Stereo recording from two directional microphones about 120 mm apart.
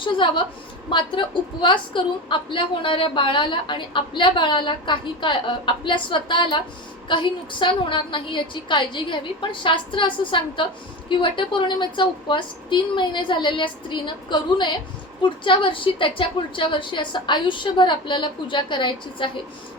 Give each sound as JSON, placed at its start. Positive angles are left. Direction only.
{"t": 0.0, "sound": "a woman's voice", "side_deg": 45}